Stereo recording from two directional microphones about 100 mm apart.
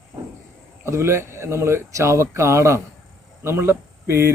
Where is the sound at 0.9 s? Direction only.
25° right (ahead or behind).